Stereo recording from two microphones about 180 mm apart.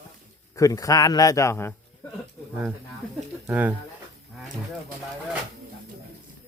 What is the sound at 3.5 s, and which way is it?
Speech, 10° right (ahead or behind).